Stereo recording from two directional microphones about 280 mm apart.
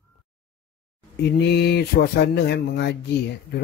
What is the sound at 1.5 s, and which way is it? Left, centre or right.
Speech, left.